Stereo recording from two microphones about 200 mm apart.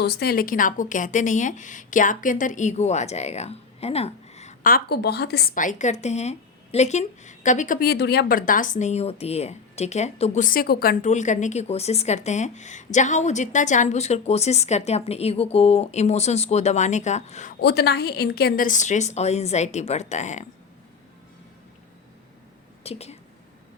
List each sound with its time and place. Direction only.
0.0 s a woman's voice: 55° left (ahead or behind); by 17.5 s 35° left (ahead or behind)
17.6 s a woman's voice: 55° left (ahead or behind); by 20.5 s 35° left (ahead or behind)
22.8 s speech: 30° left (ahead or behind)